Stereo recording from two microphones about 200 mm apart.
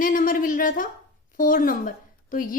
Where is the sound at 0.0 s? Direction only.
45° left (ahead or behind).